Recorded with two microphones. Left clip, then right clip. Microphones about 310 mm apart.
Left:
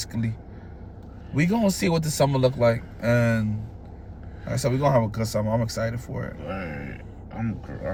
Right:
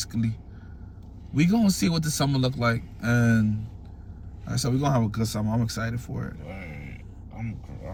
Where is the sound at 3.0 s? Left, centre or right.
Centre.